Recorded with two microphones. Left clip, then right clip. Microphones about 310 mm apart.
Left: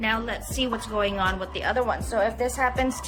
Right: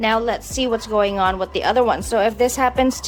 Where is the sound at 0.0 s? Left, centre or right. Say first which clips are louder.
Right 8 dB; centre.